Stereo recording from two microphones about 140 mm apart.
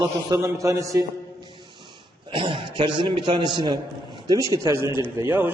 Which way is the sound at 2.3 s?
35° right (ahead or behind).